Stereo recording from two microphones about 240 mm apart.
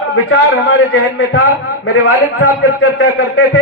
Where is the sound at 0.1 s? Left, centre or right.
Left.